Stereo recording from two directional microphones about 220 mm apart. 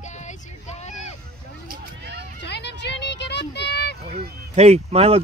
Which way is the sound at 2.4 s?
50° left (ahead or behind).